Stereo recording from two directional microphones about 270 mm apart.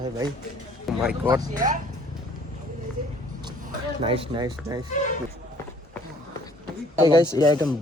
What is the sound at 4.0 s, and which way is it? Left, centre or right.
Speech, centre.